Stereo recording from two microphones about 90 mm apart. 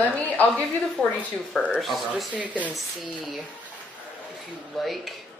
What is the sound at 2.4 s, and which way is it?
Speech, 15° right (ahead or behind).